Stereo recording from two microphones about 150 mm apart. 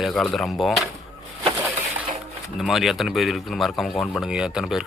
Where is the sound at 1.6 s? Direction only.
10° right (ahead or behind).